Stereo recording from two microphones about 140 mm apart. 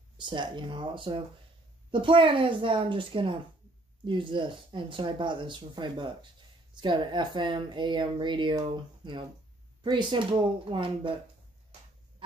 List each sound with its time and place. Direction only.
0.2 s speech: 35° right (ahead or behind)